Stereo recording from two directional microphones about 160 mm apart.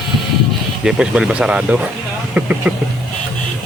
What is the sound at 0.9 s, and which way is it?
Speech, 5° right (ahead or behind).